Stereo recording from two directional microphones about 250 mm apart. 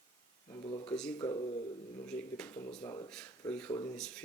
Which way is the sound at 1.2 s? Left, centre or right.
Centre.